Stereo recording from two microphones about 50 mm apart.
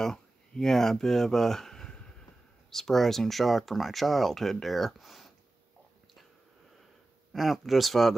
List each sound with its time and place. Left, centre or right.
0.0 s speech: centre
2.0 s a sound: centre
2.7 s speech: centre
7.3 s speech: centre